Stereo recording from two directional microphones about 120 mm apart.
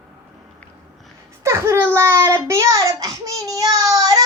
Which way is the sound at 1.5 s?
20° right (ahead or behind).